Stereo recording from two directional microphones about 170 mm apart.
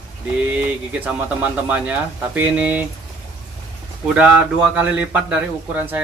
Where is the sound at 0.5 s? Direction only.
10° right (ahead or behind).